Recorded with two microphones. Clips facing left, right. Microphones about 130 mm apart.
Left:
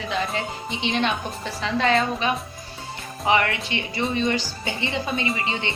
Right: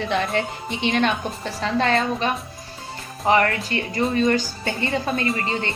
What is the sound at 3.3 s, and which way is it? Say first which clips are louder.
Speech: right 3 dB; 45° right (ahead or behind).